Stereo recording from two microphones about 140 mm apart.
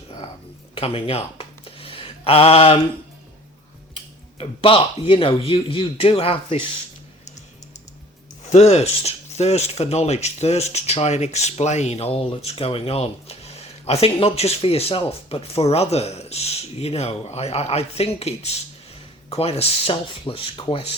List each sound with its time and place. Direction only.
0.8 s a sound: 45° left (ahead or behind)
4.4 s speech: 40° left (ahead or behind)
8.4 s speech: 50° left (ahead or behind)